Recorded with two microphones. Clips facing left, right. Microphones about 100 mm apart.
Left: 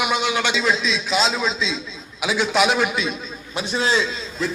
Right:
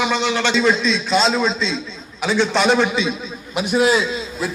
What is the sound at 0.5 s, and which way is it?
A man's voice, centre (ahead or behind).